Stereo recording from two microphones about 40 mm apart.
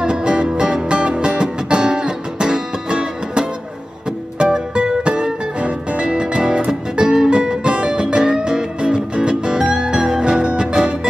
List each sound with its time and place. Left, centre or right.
0.0 s music: right